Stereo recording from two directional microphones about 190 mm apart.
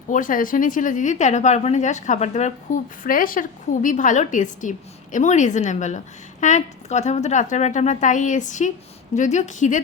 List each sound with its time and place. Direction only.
0.1 s a woman's voice: 45° left (ahead or behind)